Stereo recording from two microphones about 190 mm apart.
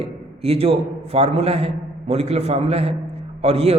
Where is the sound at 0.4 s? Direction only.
30° right (ahead or behind).